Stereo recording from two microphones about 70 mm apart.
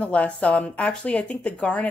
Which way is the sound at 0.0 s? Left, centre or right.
Centre.